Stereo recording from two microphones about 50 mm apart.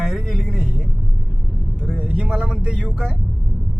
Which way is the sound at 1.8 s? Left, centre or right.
Right.